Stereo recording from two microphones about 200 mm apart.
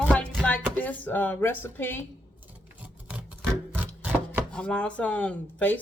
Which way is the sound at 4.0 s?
10° right (ahead or behind).